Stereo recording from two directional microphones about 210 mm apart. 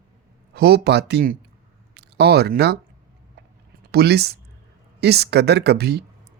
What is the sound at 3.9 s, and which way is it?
Speech, 50° right (ahead or behind).